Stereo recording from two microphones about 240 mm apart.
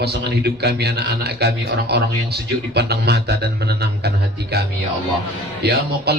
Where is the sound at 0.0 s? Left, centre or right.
Right.